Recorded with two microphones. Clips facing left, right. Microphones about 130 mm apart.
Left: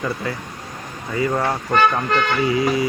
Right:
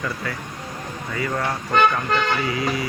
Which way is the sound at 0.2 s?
25° left (ahead or behind).